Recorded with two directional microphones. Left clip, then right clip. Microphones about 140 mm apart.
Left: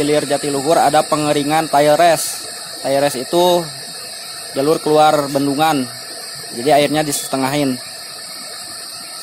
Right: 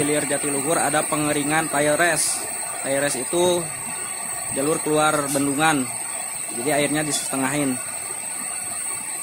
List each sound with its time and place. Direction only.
0.1 s speech: 45° left (ahead or behind)
4.6 s speech: 50° left (ahead or behind)